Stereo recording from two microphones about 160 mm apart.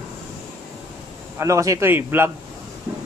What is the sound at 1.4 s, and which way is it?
Speech, 20° right (ahead or behind).